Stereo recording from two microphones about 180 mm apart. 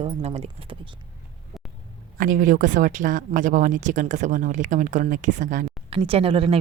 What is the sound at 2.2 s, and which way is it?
Speech, 45° right (ahead or behind).